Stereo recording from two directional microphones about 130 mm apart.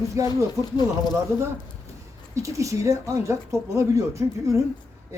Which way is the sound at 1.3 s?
20° right (ahead or behind).